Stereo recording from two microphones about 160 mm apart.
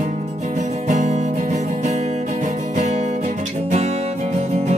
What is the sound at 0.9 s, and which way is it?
Music, 50° right (ahead or behind).